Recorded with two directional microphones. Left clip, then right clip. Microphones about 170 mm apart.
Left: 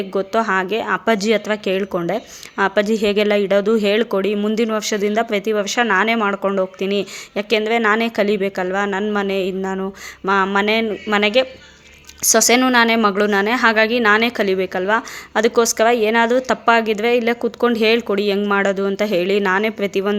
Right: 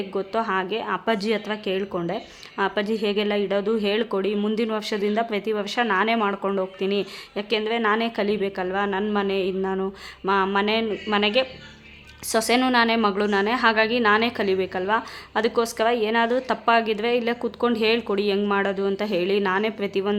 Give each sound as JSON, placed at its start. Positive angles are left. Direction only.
{"t": 0.1, "sound": "a woman's voice", "side_deg": 25}